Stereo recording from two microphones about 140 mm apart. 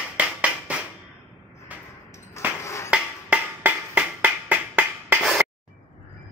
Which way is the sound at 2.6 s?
20° left (ahead or behind).